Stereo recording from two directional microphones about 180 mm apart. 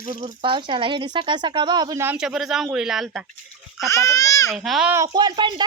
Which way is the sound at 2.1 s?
Centre (ahead or behind).